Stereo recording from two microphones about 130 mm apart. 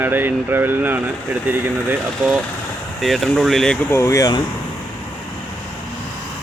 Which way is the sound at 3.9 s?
25° left (ahead or behind).